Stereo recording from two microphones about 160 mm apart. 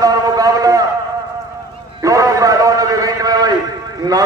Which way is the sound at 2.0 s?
20° right (ahead or behind).